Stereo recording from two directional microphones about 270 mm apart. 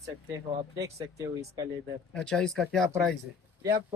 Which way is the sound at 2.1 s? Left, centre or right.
Centre.